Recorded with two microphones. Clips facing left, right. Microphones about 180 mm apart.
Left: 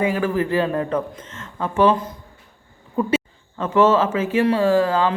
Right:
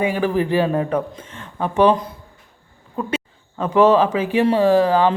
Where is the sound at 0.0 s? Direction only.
15° right (ahead or behind).